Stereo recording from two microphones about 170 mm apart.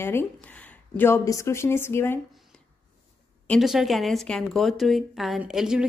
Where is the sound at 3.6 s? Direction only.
Centre (ahead or behind).